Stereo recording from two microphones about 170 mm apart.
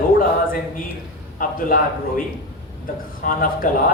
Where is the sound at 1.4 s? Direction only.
55° left (ahead or behind).